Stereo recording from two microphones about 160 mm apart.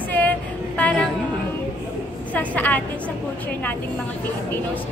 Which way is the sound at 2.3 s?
10° left (ahead or behind).